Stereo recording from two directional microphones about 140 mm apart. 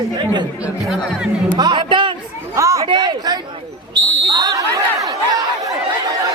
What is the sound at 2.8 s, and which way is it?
Chatter, 35° right (ahead or behind).